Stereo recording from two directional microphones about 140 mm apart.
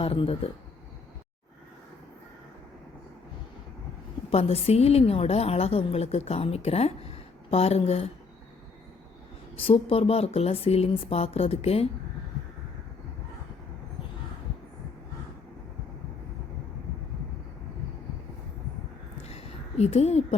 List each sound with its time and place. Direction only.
0.0 s a woman's voice: 40° left (ahead or behind)
4.3 s a woman's voice: 45° left (ahead or behind)
9.6 s a woman's voice: 40° left (ahead or behind)
19.3 s a sound: 50° left (ahead or behind)